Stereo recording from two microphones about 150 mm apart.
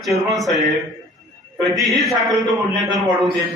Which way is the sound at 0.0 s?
Centre (ahead or behind).